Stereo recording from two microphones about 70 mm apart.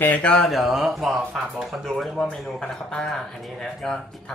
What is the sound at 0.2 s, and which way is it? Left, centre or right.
Speech, centre.